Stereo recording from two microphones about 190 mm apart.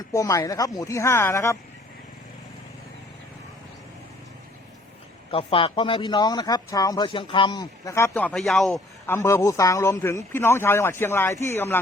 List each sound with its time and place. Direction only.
0.1 s a man's voice: 15° left (ahead or behind)
5.3 s speech: 30° left (ahead or behind); by 8.8 s centre (ahead or behind)
9.0 s a man's voice: 15° left (ahead or behind)